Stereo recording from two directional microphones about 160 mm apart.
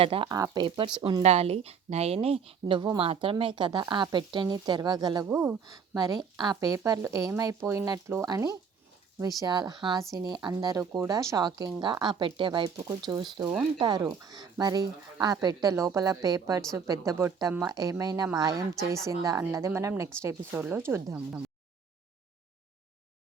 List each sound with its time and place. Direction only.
0.0 s speech: 35° right (ahead or behind)
1.2 s a woman's voice: 40° right (ahead or behind); by 21.4 s 15° right (ahead or behind)